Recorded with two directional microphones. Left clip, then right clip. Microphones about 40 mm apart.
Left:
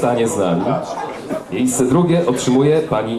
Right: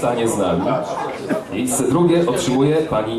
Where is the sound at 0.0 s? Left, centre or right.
Centre.